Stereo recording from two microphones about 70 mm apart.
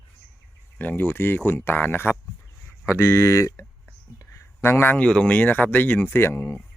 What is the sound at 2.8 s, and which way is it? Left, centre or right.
Speech, left.